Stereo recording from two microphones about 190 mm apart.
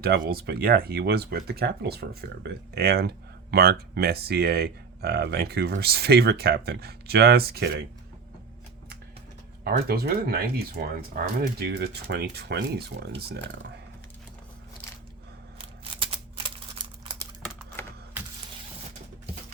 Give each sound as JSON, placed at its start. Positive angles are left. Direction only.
{"t": 0.0, "sound": "speech", "side_deg": -50}
{"t": 9.6, "sound": "speech", "side_deg": -55}
{"t": 15.5, "sound": "a sound", "side_deg": -30}
{"t": 16.7, "sound": "crumpling", "side_deg": -25}
{"t": 17.8, "sound": "typing", "side_deg": 10}